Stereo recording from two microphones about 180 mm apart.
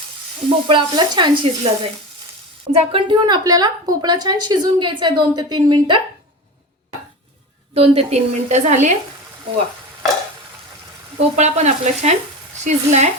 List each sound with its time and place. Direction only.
0.7 s a woman's voice: 25° right (ahead or behind)
7.7 s a woman's voice: 35° right (ahead or behind)
11.2 s a woman's voice: 40° right (ahead or behind)